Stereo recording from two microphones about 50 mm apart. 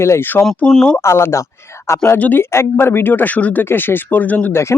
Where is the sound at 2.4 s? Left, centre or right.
Left.